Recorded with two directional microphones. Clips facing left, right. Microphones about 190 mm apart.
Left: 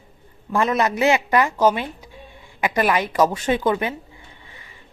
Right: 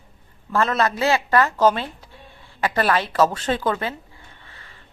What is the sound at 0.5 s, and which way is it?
A woman's voice, 15° left (ahead or behind).